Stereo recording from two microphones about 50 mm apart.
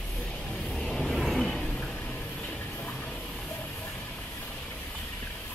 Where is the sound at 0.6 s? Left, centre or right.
Centre.